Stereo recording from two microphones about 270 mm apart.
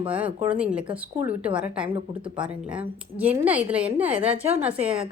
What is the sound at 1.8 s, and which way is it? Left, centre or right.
Speech, centre.